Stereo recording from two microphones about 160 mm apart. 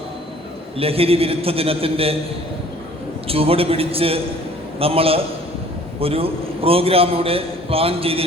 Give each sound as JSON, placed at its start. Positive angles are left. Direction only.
{"t": 0.8, "sound": "a man's voice", "side_deg": -35}
{"t": 3.2, "sound": "a man's voice", "side_deg": -35}